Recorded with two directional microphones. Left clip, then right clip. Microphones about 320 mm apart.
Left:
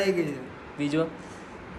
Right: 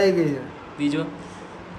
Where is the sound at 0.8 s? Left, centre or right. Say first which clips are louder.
Right 2 dB; centre.